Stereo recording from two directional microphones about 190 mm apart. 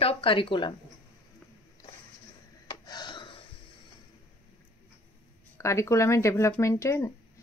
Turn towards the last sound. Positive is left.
turn(degrees=15)  # may be behind; listen again after turning